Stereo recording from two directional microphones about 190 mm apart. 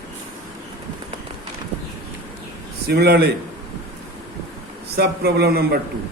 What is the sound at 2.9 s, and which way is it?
Speech, 60° right (ahead or behind).